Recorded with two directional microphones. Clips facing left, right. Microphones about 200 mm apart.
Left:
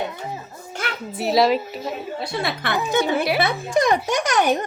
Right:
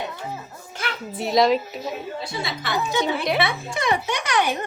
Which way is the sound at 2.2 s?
60° left (ahead or behind).